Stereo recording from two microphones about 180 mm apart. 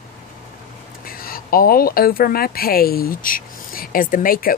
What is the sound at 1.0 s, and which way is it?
Speech, 55° left (ahead or behind).